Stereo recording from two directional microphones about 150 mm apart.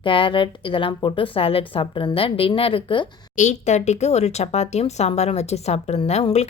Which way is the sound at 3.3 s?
50° left (ahead or behind).